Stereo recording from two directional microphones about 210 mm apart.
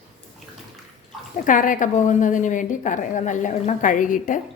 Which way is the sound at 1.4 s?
40° left (ahead or behind).